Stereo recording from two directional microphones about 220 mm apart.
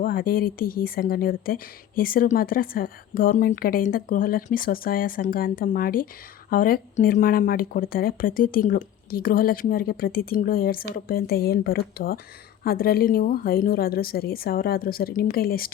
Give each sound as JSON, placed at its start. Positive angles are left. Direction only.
{"t": 0.0, "sound": "speech", "side_deg": 40}